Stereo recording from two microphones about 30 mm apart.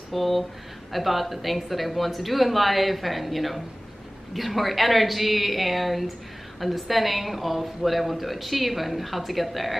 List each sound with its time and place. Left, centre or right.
0.1 s a woman's voice: centre